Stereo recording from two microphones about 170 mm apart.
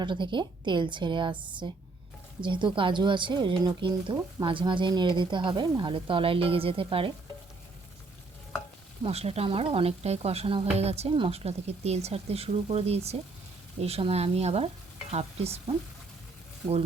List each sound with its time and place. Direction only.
0.0 s speech: 30° right (ahead or behind)
9.0 s a woman's voice: 35° right (ahead or behind)